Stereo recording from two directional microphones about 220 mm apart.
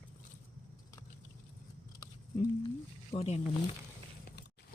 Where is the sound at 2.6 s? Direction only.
25° left (ahead or behind).